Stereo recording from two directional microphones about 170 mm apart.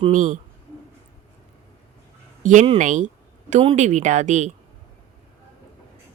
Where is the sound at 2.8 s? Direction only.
45° right (ahead or behind).